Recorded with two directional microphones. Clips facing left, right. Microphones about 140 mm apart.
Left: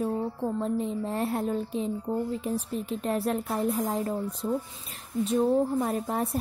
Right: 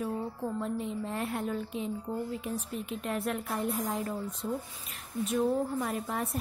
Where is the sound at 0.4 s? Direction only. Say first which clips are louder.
Left 5 dB; 30° left (ahead or behind).